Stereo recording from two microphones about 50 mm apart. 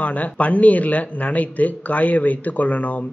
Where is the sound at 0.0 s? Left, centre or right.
Left.